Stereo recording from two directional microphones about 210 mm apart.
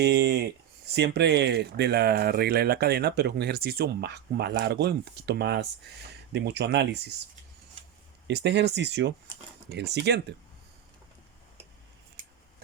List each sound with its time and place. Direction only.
0.0 s speech: 50° right (ahead or behind)
8.3 s speech: 55° right (ahead or behind)